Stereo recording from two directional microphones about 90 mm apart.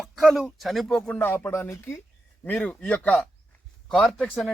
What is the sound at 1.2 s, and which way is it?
Speech, 25° left (ahead or behind).